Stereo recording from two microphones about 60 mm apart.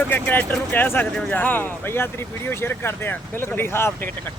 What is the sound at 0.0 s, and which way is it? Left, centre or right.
Speech, left.